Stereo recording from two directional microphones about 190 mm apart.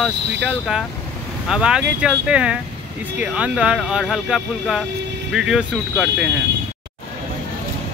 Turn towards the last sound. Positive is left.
turn(degrees=-5)  # may be behind; listen again after turning